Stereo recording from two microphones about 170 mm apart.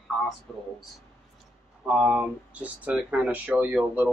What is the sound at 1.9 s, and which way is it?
Speech, 5° right (ahead or behind).